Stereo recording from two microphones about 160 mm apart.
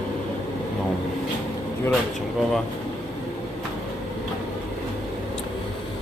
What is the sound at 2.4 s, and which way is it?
Speech, centre (ahead or behind).